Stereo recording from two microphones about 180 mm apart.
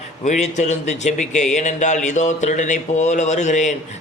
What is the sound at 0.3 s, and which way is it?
Speech, 40° left (ahead or behind).